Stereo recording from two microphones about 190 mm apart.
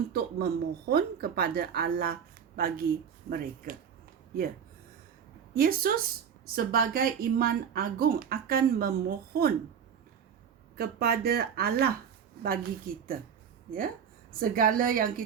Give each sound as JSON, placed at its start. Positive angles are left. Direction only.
{"t": 0.1, "sound": "speech", "side_deg": -55}
{"t": 5.5, "sound": "speech", "side_deg": -50}
{"t": 10.8, "sound": "speech", "side_deg": -55}
{"t": 14.3, "sound": "speech", "side_deg": -50}